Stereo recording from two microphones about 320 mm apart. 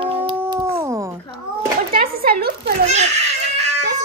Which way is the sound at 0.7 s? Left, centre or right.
Centre.